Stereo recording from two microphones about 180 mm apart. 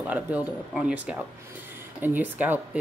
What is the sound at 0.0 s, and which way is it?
Speech, 10° right (ahead or behind).